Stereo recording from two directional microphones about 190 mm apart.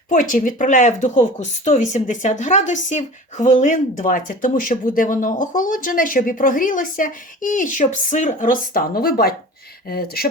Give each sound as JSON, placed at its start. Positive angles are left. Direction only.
{"t": 0.1, "sound": "speech", "side_deg": 45}